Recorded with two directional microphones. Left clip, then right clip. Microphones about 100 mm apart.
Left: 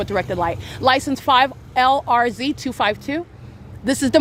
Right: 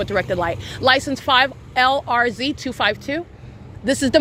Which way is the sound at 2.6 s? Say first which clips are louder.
Even; 55° left (ahead or behind).